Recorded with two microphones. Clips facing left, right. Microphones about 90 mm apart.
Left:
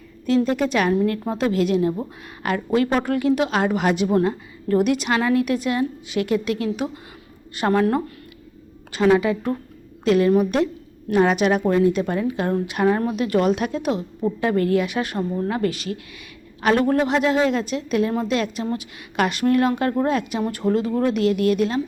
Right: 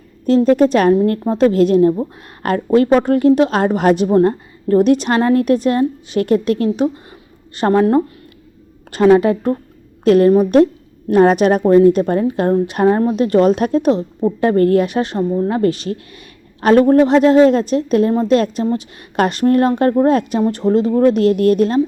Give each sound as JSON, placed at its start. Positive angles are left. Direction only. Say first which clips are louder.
{"t": 0.3, "sound": "a woman's voice", "louder": "right 8 dB", "side_deg": -40}
{"t": 8.9, "sound": "a woman's voice", "louder": "right 7 dB", "side_deg": -45}